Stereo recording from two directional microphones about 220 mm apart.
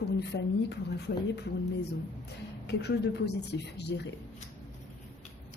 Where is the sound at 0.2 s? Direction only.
50° left (ahead or behind).